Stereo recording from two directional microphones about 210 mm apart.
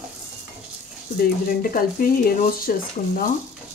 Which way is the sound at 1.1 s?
40° left (ahead or behind).